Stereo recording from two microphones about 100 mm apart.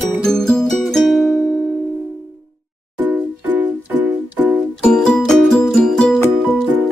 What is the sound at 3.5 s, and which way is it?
Music, 15° right (ahead or behind).